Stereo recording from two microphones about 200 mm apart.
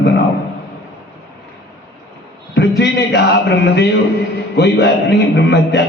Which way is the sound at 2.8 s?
55° left (ahead or behind).